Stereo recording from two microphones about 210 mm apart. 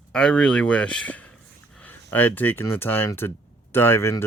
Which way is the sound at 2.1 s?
10° left (ahead or behind).